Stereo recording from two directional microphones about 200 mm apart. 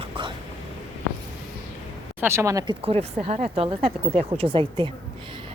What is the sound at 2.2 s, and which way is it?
Speech, 15° right (ahead or behind).